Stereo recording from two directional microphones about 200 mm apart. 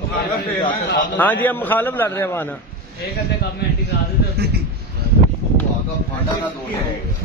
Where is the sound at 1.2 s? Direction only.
10° left (ahead or behind).